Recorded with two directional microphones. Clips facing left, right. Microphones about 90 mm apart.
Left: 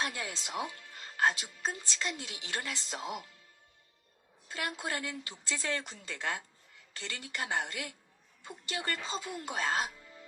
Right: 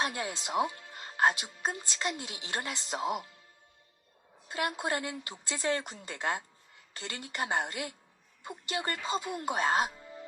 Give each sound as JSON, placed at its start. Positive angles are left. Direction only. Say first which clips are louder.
{"t": 0.0, "sound": "a woman's voice", "louder": "right 3 dB", "side_deg": -25}
{"t": 4.4, "sound": "a woman's voice", "louder": "right 5 dB", "side_deg": -20}